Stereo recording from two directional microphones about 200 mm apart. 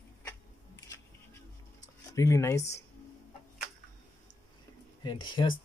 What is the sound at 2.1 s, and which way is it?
Speech, 15° left (ahead or behind).